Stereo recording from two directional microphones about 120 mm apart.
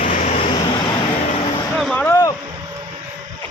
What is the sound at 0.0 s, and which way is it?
Vehicle, 85° left.